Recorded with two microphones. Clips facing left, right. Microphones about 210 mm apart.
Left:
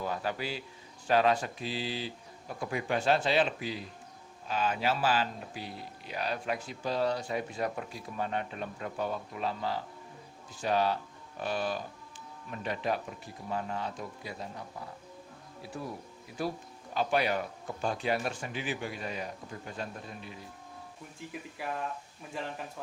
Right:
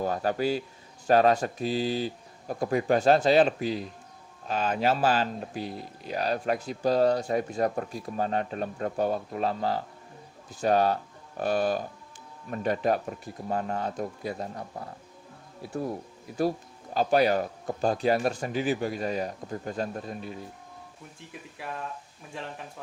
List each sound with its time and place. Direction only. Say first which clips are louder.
0.0 s speech: right 7 dB; 45° right (ahead or behind)
16.9 s speech: right 6 dB; 40° right (ahead or behind)
21.6 s speech: even; centre (ahead or behind)